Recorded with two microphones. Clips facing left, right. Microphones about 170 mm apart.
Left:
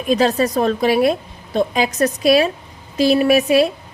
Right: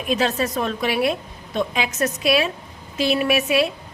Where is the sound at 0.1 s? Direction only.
35° left (ahead or behind).